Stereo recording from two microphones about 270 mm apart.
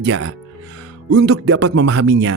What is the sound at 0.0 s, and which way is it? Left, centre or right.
Speech, right.